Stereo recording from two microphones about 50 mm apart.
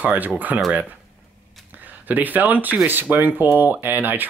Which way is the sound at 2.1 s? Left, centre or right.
Right.